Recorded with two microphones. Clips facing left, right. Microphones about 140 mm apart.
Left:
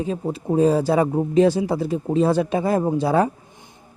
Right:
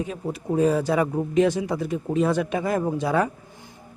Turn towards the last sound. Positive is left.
turn(degrees=30)  # may be behind; listen again after turning